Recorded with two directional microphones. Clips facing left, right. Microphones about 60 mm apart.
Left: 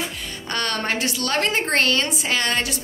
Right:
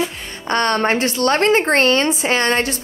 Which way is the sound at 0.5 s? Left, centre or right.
Right.